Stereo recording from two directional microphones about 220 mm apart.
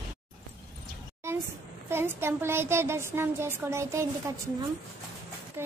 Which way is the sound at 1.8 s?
10° right (ahead or behind).